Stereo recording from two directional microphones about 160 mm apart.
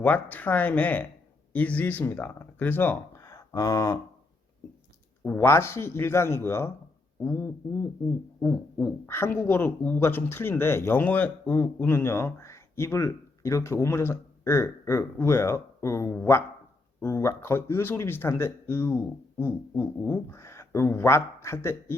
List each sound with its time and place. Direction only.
0.0 s speech: 10° left (ahead or behind)
5.2 s speech: 15° left (ahead or behind)